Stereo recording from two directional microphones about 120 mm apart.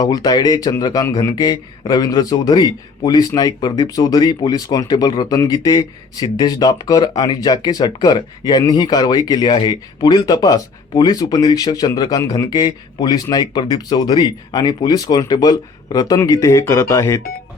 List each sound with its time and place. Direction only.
0.0 s speech: 35° left (ahead or behind)